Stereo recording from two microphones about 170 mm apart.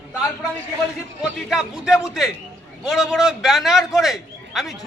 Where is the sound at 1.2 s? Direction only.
5° right (ahead or behind).